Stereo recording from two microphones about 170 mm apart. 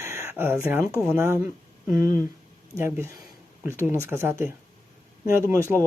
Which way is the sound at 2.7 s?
15° right (ahead or behind).